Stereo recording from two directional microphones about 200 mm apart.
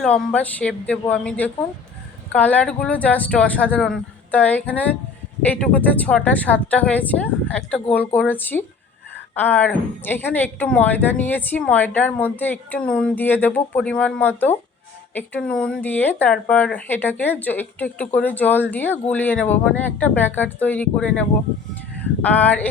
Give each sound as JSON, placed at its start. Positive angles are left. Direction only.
{"t": 0.0, "sound": "speech", "side_deg": 5}